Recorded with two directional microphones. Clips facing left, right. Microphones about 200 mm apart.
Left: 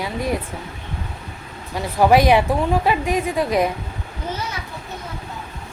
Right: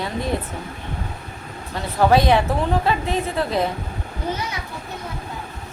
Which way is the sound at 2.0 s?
15° left (ahead or behind).